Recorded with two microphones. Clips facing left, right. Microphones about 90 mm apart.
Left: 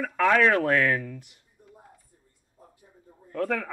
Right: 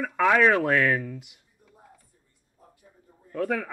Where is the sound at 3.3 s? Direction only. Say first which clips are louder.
Even; 10° right (ahead or behind).